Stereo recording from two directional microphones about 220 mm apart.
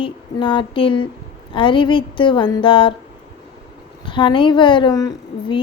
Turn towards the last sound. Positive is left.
turn(degrees=15)  # may be behind; listen again after turning